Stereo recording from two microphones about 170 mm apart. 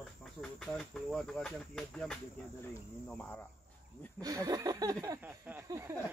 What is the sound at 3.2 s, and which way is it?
Speech, 10° left (ahead or behind).